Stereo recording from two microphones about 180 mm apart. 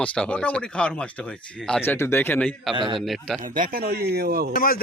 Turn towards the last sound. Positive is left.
turn(degrees=55)  # may be behind; listen again after turning